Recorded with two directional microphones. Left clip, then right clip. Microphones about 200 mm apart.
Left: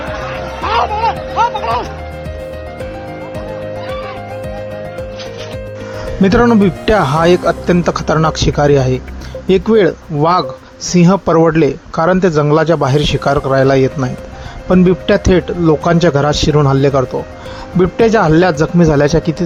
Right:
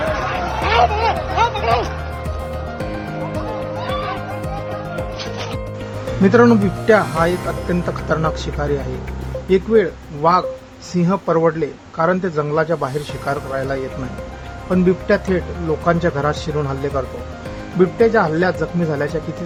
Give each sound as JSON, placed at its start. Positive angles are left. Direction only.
{"t": 0.1, "sound": "music", "side_deg": -10}
{"t": 1.6, "sound": "speech", "side_deg": 10}
{"t": 3.8, "sound": "music", "side_deg": -15}
{"t": 6.2, "sound": "speech", "side_deg": 30}